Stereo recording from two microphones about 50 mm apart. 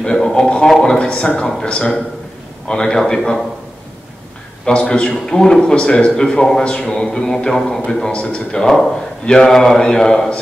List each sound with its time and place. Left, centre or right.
0.0 s a sound: centre
0.8 s a man's voice: centre
4.6 s a man's voice: left